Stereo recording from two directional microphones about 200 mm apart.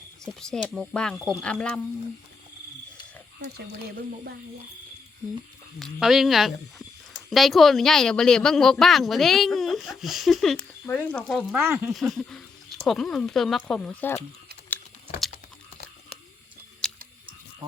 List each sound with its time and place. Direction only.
0.3 s speech: 5° left (ahead or behind)
3.9 s speech: 50° right (ahead or behind)
5.8 s speech: centre (ahead or behind)
10.8 s speech: 10° left (ahead or behind)
11.3 s speech: 10° right (ahead or behind)
11.9 s speech: centre (ahead or behind)
16.8 s tick-tock: 5° left (ahead or behind)